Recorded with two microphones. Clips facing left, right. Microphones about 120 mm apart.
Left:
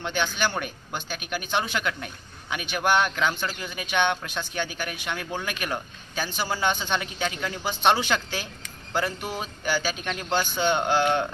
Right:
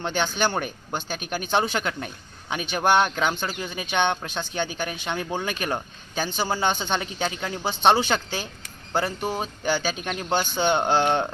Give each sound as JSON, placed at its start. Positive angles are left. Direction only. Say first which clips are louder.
{"t": 0.0, "sound": "speech", "louder": "right 2 dB", "side_deg": -30}
{"t": 10.1, "sound": "speech", "louder": "right 2 dB", "side_deg": -15}
{"t": 10.3, "sound": "speech", "louder": "right 2 dB", "side_deg": -25}